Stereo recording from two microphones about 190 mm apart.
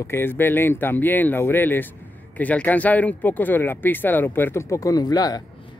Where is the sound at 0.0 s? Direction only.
10° left (ahead or behind).